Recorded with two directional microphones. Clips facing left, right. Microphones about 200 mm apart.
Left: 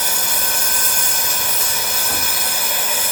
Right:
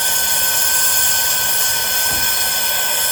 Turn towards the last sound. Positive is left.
turn(degrees=10)  # may be behind; listen again after turning